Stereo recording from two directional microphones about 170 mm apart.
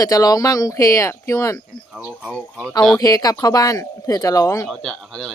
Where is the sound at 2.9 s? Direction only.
20° left (ahead or behind).